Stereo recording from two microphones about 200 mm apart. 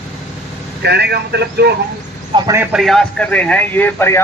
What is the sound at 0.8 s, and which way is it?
Speech, 55° right (ahead or behind).